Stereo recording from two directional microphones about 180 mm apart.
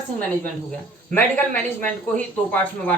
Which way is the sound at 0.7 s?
10° left (ahead or behind).